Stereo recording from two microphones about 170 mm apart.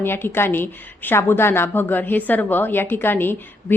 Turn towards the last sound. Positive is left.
turn(degrees=10)  # may be behind; listen again after turning